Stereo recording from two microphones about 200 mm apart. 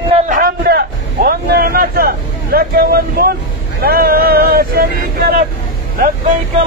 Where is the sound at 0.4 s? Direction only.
50° right (ahead or behind).